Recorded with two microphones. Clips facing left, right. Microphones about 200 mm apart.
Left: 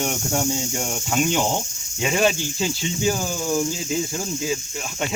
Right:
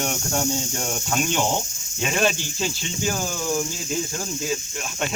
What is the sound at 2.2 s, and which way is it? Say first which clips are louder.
Speech: left 2 dB; 15° left (ahead or behind).